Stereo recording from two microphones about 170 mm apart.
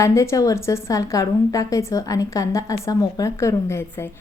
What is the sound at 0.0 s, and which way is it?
A woman's voice, 15° left (ahead or behind).